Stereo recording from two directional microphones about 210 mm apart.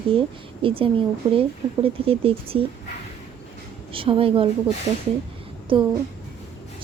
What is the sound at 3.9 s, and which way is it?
Speech, 25° right (ahead or behind).